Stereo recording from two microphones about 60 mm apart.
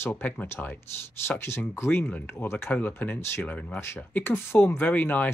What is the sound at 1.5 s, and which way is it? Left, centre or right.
Speech, left.